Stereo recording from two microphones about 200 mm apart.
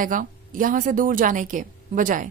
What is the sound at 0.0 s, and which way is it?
Speech, 40° right (ahead or behind).